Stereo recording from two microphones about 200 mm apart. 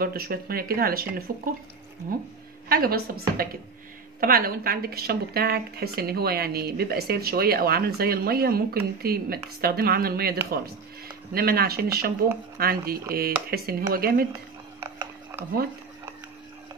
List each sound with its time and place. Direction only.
0.0 s a woman's voice: 50° right (ahead or behind)
2.7 s a woman's voice: 50° right (ahead or behind)
14.8 s a sound: 10° right (ahead or behind)